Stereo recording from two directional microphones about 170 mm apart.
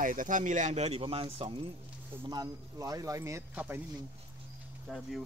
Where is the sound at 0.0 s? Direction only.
50° right (ahead or behind); by 1.5 s 30° right (ahead or behind).